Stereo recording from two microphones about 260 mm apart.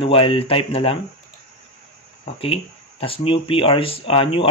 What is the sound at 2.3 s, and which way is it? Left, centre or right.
Speech, left.